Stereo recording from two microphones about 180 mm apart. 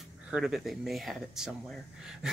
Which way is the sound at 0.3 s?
5° right (ahead or behind).